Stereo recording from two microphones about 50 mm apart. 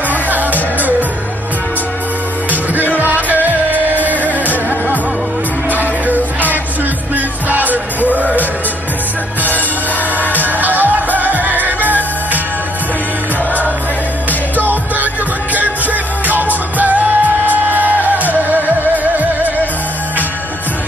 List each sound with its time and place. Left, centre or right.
0.1 s music: right
3.3 s music: right
6.0 s music: right
10.6 s music: right
14.6 s music: right